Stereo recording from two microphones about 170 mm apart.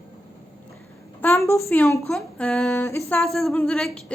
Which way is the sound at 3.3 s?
Centre (ahead or behind).